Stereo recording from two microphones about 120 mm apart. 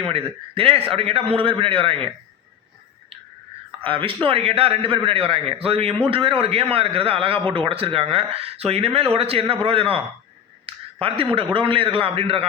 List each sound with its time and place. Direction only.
0.1 s a man's voice: 50° right (ahead or behind)
3.8 s a man's voice: 45° right (ahead or behind)